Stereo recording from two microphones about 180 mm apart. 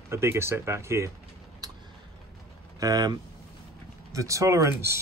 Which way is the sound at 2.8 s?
20° right (ahead or behind).